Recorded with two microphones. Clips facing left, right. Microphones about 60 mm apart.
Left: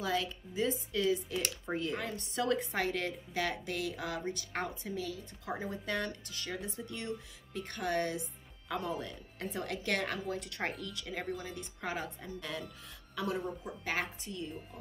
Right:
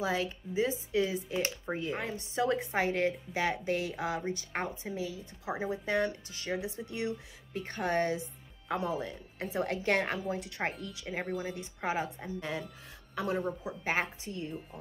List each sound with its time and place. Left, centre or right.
0.0 s speech: right
2.4 s speech: right
8.7 s speech: centre
9.5 s speech: right
10.1 s a woman's voice: centre; by 14.5 s right